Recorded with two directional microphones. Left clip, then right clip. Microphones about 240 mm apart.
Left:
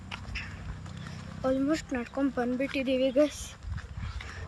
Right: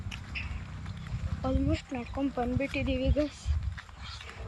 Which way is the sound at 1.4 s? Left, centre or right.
Centre.